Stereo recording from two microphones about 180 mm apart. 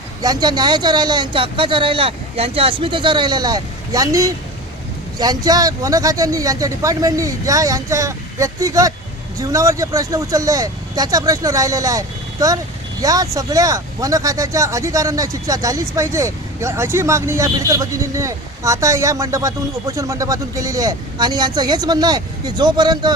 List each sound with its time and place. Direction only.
0.2 s speech: 20° right (ahead or behind)